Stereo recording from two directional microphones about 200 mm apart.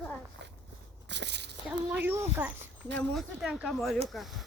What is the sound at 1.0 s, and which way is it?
Walk, 60° right (ahead or behind).